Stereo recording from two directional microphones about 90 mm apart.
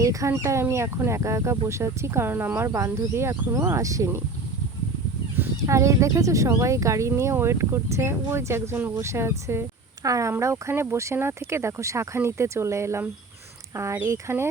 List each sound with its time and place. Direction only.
0.0 s speech: 35° right (ahead or behind)
2.6 s speech: 35° right (ahead or behind)
5.6 s speech: 35° right (ahead or behind); by 9.0 s 20° right (ahead or behind)
9.0 s speech: 30° right (ahead or behind)